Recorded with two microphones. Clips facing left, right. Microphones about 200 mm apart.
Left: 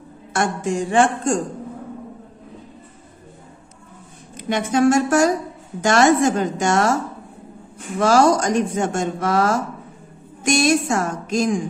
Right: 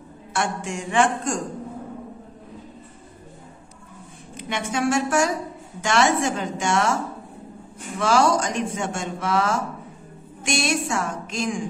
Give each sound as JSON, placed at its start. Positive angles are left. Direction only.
{"t": 0.3, "sound": "speech", "side_deg": 40}
{"t": 4.4, "sound": "speech", "side_deg": 40}
{"t": 8.0, "sound": "speech", "side_deg": 40}